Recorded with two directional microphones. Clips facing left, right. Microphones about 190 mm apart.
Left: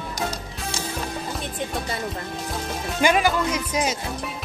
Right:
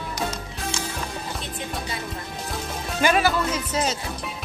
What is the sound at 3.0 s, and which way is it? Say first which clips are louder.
Speech: left 1 dB; 15° left (ahead or behind).